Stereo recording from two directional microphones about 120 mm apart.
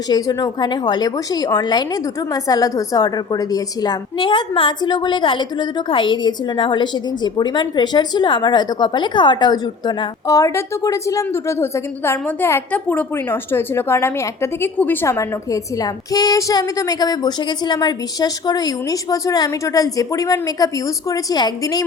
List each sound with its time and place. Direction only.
0.1 s a woman's voice: 35° left (ahead or behind)